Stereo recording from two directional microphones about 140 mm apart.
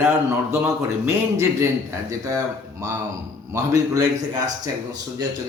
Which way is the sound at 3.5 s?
25° right (ahead or behind).